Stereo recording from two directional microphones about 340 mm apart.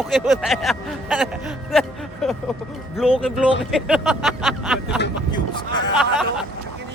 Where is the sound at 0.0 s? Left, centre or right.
Centre.